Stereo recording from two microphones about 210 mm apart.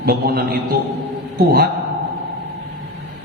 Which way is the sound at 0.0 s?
45° right (ahead or behind).